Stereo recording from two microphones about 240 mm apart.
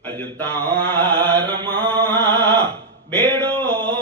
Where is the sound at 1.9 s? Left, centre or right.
Centre.